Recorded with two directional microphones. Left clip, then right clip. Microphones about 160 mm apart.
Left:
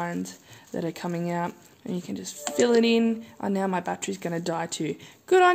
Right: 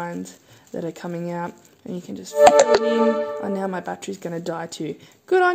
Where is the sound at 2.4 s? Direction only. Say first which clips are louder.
Right 9 dB; 80° right.